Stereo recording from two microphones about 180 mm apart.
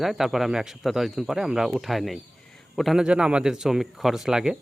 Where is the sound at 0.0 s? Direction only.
Centre (ahead or behind).